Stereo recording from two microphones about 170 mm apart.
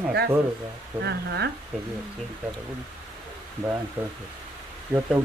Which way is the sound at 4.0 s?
10° right (ahead or behind).